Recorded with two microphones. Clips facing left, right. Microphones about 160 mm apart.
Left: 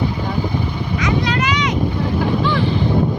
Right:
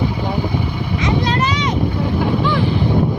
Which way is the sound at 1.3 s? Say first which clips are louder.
Right 1 dB; 40° right (ahead or behind).